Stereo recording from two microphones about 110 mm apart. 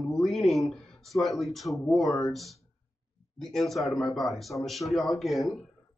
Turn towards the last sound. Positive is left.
turn(degrees=0)  # may be behind; listen again after turning